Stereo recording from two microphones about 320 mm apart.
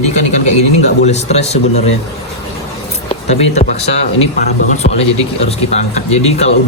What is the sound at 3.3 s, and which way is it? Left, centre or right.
Speech, centre.